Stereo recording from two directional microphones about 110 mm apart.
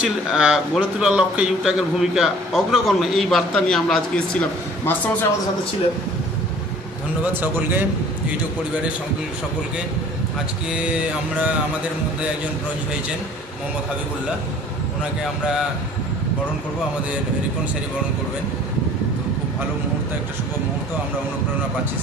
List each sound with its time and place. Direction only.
0.0 s a man's voice: 5° right (ahead or behind)
4.4 s speech: 15° left (ahead or behind)